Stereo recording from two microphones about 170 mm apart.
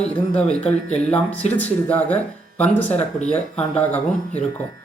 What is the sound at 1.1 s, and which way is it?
Speech, 5° left (ahead or behind).